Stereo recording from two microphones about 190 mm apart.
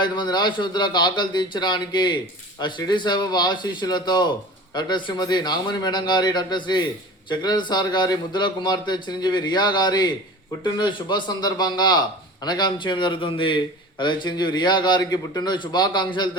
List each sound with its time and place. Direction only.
0.0 s a man's voice: 25° left (ahead or behind)